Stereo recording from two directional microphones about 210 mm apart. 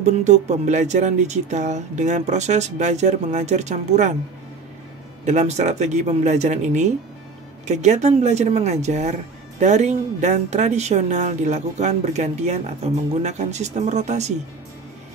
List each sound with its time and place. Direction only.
0.0 s speech: 35° right (ahead or behind)
5.2 s speech: 35° right (ahead or behind)